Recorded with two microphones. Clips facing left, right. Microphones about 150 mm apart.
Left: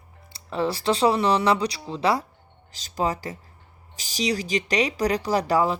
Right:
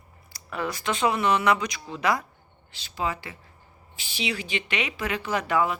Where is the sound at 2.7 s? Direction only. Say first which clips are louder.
Left 4 dB; 40° left (ahead or behind).